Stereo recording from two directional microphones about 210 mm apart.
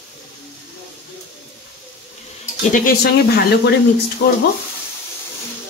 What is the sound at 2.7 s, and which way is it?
Speech, 45° left (ahead or behind).